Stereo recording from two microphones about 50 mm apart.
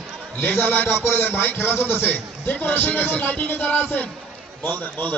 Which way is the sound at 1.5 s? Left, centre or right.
Left.